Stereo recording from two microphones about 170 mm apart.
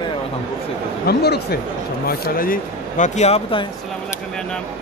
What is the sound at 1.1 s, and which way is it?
Speech, 70° left (ahead or behind).